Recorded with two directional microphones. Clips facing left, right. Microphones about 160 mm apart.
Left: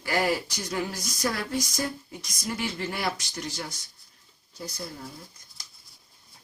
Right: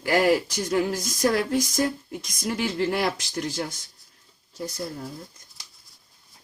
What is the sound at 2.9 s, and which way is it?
Speech, 50° right (ahead or behind).